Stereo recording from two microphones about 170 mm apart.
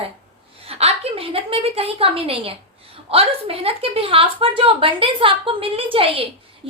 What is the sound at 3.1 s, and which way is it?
A woman's voice, 35° right (ahead or behind).